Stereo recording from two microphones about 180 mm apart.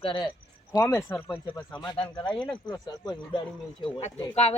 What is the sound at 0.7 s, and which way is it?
Speech, 15° left (ahead or behind).